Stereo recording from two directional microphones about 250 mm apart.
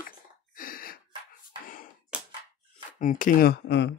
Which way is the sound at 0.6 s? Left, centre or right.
Left.